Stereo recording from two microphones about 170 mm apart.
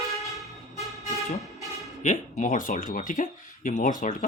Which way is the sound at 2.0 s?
45° left (ahead or behind).